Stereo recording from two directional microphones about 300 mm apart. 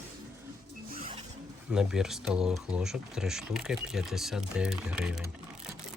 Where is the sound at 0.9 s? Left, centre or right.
Right.